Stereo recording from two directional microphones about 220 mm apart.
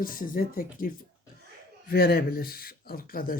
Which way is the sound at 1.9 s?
45° left (ahead or behind).